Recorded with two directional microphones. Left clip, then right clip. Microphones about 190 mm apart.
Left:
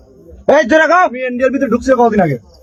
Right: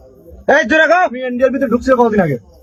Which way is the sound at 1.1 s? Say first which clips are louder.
Even; 10° right (ahead or behind).